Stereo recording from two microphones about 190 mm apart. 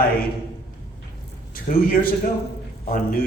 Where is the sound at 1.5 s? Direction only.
50° left (ahead or behind).